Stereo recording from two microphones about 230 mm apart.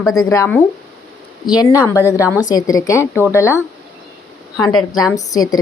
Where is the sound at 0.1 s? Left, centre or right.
Centre.